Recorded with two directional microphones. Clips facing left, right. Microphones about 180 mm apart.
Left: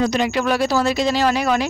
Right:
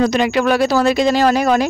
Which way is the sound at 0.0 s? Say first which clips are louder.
Right 4 dB; 70° right (ahead or behind).